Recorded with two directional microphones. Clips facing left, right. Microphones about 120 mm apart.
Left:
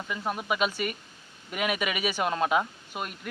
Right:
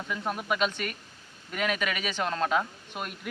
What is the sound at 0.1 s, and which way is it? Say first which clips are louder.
A man's voice: even; centre (ahead or behind).